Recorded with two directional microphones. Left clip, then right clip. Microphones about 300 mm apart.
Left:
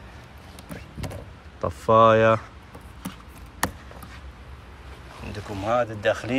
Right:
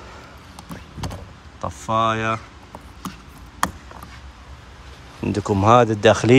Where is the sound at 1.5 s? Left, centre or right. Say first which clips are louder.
Left 4 dB; centre.